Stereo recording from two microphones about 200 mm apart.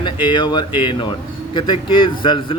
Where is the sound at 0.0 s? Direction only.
25° left (ahead or behind).